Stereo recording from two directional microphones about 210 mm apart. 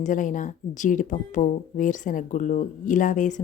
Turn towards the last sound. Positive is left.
turn(degrees=35)  # may be behind; listen again after turning